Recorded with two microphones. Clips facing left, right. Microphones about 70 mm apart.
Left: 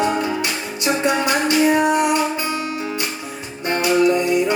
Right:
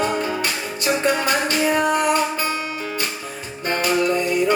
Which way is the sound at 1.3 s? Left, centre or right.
Right.